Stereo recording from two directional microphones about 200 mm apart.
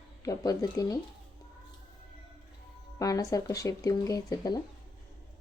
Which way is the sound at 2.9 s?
15° left (ahead or behind).